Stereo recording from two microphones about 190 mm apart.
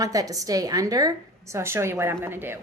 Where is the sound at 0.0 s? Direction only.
20° right (ahead or behind).